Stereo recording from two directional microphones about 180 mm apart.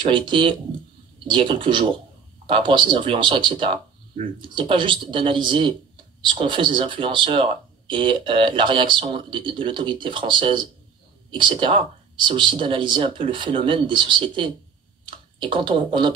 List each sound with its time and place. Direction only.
0.0 s speech: 25° right (ahead or behind)